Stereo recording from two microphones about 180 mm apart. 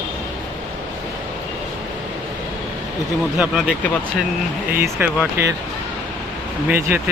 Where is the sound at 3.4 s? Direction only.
5° right (ahead or behind).